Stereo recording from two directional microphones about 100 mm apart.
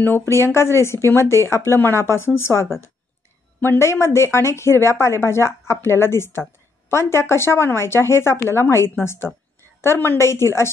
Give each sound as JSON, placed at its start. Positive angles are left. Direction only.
{"t": 0.0, "sound": "speech", "side_deg": 25}